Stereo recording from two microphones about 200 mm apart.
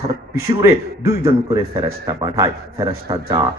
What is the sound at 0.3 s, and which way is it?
A man's voice, 15° right (ahead or behind).